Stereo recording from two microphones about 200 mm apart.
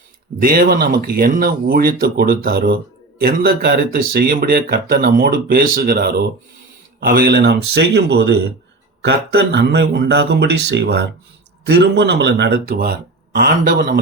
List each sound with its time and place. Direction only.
0.3 s speech: 50° right (ahead or behind)